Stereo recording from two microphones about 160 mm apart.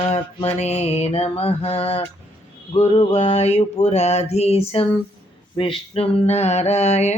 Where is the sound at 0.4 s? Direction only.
40° left (ahead or behind).